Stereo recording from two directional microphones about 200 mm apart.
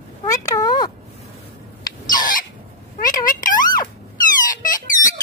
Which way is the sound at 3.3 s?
40° left (ahead or behind).